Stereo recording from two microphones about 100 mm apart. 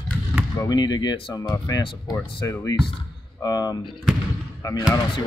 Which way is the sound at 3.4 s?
40° left (ahead or behind).